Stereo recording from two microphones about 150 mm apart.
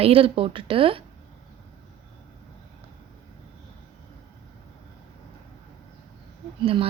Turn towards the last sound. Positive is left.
turn(degrees=-35)  # may be behind; listen again after turning